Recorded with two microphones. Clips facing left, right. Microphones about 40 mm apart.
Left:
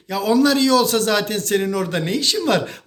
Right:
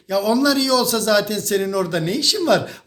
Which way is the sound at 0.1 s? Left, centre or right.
Left.